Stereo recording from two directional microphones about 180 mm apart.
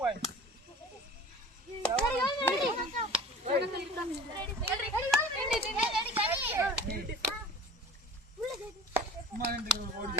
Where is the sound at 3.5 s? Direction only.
65° right (ahead or behind).